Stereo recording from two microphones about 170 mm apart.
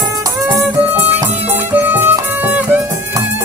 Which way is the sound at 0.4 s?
10° right (ahead or behind).